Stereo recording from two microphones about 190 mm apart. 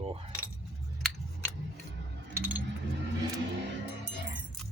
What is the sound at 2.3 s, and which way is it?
Keys jangling, 10° right (ahead or behind).